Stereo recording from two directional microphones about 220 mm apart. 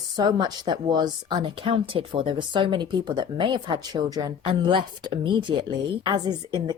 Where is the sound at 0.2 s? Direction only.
20° right (ahead or behind).